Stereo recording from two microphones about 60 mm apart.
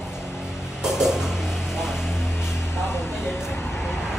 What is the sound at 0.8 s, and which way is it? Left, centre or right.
Music, centre.